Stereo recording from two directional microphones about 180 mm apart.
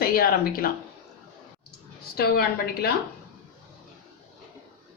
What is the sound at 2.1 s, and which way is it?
Speech, 60° left (ahead or behind).